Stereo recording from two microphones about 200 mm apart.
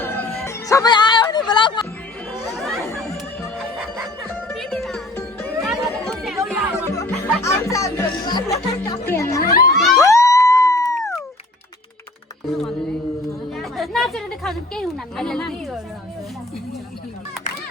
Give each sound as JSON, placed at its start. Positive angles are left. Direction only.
{"t": 0.0, "sound": "music", "side_deg": 10}
{"t": 2.4, "sound": "chatter", "side_deg": 0}
{"t": 3.0, "sound": "music", "side_deg": 5}
{"t": 5.9, "sound": "chatter", "side_deg": 0}
{"t": 6.8, "sound": "music", "side_deg": 15}
{"t": 9.7, "sound": "music", "side_deg": 0}
{"t": 10.0, "sound": "music", "side_deg": 15}
{"t": 13.6, "sound": "a sound", "side_deg": 0}